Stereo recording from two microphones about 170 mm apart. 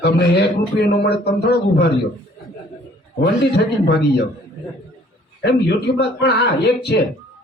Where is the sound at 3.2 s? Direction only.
75° left (ahead or behind).